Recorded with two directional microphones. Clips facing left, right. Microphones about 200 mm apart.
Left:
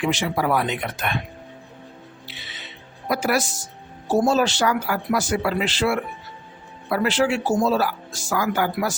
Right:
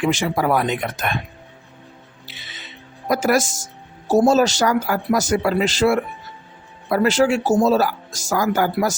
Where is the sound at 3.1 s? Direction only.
45° right (ahead or behind).